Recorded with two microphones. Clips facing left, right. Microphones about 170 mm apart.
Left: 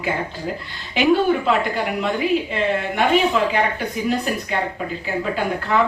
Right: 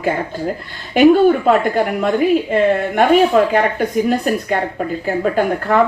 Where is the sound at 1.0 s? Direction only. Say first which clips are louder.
Right 7 dB; 50° right (ahead or behind).